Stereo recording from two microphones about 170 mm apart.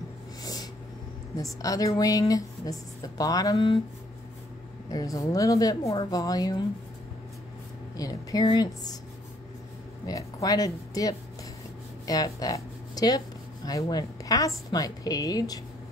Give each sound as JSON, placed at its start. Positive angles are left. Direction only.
{"t": 0.4, "sound": "snort", "side_deg": 25}
{"t": 1.3, "sound": "speech", "side_deg": 20}
{"t": 4.9, "sound": "speech", "side_deg": 20}
{"t": 8.0, "sound": "speech", "side_deg": 20}
{"t": 10.0, "sound": "speech", "side_deg": 20}